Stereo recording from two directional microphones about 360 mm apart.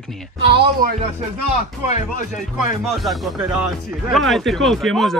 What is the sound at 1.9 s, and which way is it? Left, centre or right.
Speech, centre.